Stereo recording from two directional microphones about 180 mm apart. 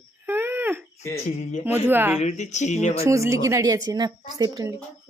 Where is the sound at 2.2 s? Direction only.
40° left (ahead or behind).